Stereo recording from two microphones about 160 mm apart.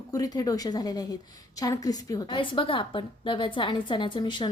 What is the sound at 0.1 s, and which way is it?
A woman's voice, 25° left (ahead or behind).